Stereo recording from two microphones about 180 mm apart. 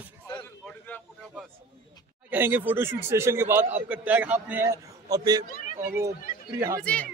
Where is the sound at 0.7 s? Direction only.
10° left (ahead or behind).